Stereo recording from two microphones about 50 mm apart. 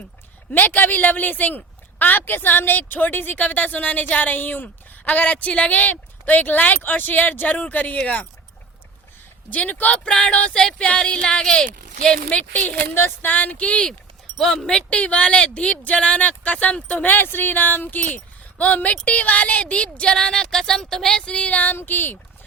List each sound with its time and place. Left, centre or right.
0.5 s a woman's voice: left
9.5 s speech: left
12.6 s speech: left
13.3 s speech: left
14.3 s a woman's voice: centre; by 21.8 s left
21.8 s speech: left